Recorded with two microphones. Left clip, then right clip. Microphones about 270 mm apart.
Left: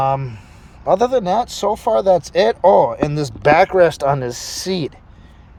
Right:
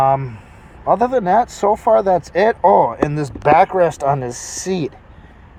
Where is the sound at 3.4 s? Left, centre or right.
Left.